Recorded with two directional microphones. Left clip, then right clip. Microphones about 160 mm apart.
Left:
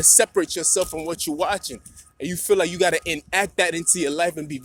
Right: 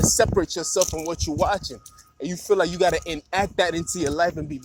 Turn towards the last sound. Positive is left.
turn(degrees=25)  # may be behind; listen again after turning